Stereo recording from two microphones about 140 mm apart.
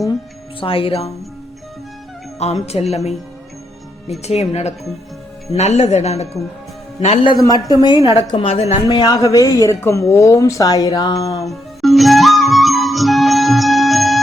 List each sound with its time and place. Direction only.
0.6 s speech: 40° left (ahead or behind)
2.6 s speech: 50° left (ahead or behind)
4.2 s speech: 50° left (ahead or behind)
7.3 s speech: 25° left (ahead or behind); by 9.0 s 50° left (ahead or behind)
9.0 s speech: 25° left (ahead or behind)
11.4 s music: centre (ahead or behind)